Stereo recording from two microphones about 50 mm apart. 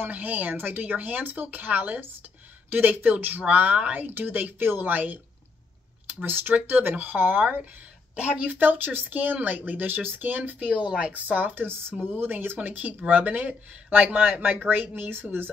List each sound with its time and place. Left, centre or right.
0.1 s speech: right
4.0 s speech: right
11.6 s speech: right
12.6 s speech: right